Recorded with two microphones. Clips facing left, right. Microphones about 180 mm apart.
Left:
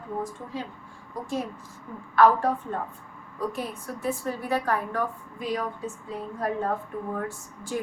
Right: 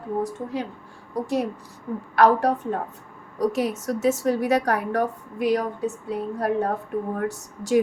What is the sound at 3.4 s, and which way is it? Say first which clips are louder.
A woman's voice: right 8 dB; 90° right.